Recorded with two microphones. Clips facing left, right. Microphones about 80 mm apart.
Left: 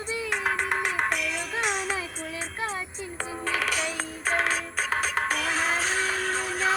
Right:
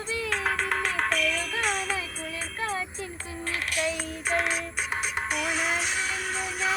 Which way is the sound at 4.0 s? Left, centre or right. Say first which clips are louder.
Left 1 dB; left.